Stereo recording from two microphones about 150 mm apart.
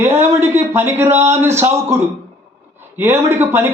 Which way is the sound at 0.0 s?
15° right (ahead or behind).